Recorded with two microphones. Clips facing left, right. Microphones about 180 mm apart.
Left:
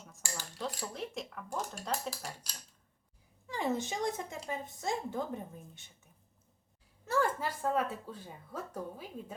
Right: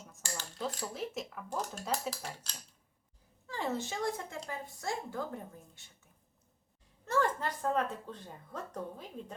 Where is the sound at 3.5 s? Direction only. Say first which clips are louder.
Left 2 dB; 15° left (ahead or behind).